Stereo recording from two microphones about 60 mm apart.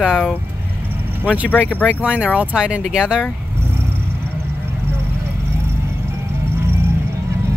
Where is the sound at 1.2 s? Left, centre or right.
Right.